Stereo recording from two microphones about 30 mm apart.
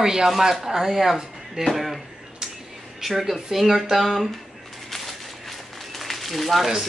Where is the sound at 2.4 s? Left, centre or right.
Right.